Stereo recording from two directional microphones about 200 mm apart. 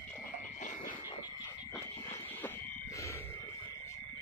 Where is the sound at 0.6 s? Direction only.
40° left (ahead or behind).